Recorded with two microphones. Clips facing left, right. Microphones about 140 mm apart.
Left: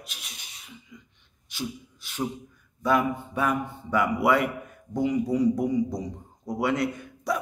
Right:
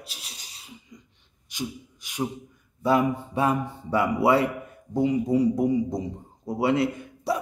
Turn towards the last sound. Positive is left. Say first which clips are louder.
# right 1 dB
turn(degrees=-30)  # may be behind; listen again after turning